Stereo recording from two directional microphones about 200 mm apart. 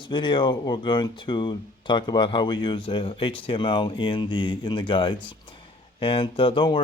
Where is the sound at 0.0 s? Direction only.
25° left (ahead or behind).